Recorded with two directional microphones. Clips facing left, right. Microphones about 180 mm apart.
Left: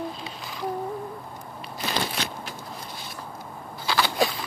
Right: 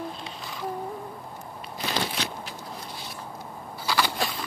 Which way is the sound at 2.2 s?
50° left (ahead or behind).